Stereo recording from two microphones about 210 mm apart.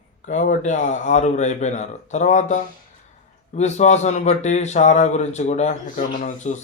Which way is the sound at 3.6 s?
35° left (ahead or behind).